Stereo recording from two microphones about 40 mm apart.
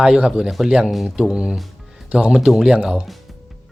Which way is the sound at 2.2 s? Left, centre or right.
Centre.